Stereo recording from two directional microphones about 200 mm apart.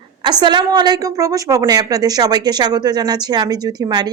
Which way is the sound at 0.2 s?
20° right (ahead or behind).